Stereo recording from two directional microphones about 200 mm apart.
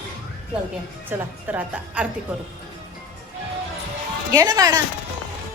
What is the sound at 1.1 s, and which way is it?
Speech, 10° right (ahead or behind).